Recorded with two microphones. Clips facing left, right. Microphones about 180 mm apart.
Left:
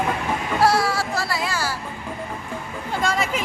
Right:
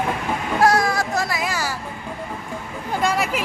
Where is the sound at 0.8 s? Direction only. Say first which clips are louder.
Right 2 dB; 15° right (ahead or behind).